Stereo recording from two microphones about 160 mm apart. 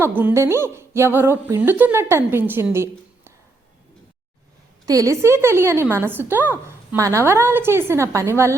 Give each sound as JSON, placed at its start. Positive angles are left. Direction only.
{"t": 0.2, "sound": "a woman's voice", "side_deg": -15}
{"t": 4.9, "sound": "a woman's voice", "side_deg": -20}